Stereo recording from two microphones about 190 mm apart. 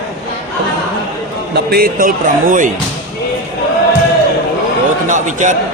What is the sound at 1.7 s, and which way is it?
Speech, 50° right (ahead or behind).